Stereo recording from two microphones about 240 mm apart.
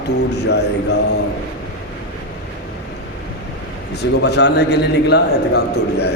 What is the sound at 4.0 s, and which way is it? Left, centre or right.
Mantra, left.